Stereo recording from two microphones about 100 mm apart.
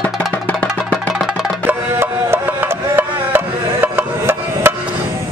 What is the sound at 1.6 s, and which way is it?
Music, 20° right (ahead or behind).